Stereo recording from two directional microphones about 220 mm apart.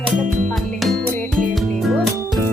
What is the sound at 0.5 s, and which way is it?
Music, centre (ahead or behind).